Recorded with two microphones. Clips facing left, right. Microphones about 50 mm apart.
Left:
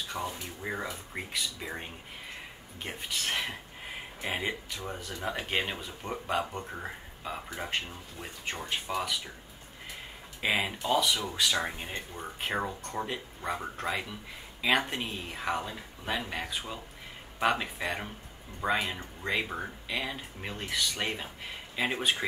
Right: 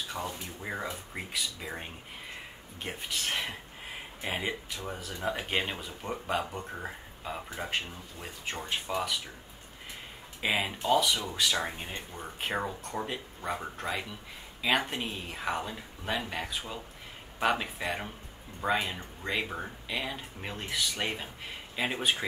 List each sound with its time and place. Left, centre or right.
0.1 s speech: centre
10.4 s speech: centre